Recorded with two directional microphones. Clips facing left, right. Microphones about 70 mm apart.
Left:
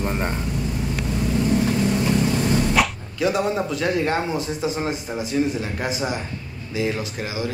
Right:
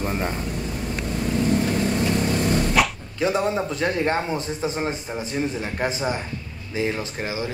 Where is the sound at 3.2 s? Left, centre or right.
Right.